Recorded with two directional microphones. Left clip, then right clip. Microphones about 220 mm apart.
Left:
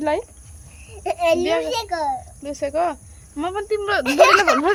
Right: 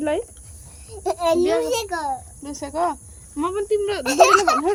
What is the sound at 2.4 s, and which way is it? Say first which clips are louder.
Speech: left 3 dB; 15° left (ahead or behind).